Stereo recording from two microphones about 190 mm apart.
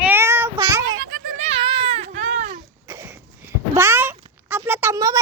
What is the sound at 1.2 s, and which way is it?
Baby cry, 35° right (ahead or behind).